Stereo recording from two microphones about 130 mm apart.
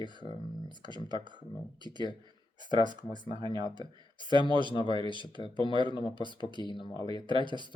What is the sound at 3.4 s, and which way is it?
Speech, 35° right (ahead or behind).